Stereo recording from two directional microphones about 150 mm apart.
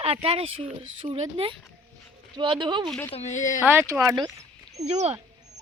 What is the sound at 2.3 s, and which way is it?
Speech, 30° right (ahead or behind).